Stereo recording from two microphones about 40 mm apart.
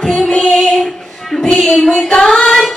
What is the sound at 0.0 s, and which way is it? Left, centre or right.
Female singing, centre.